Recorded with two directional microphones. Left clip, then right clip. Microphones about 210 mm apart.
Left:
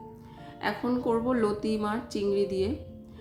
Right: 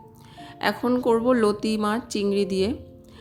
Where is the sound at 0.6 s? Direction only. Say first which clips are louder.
Right 6 dB; 45° right (ahead or behind).